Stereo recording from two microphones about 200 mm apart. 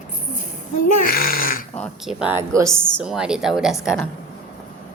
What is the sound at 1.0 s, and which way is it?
Speech, 45° left (ahead or behind).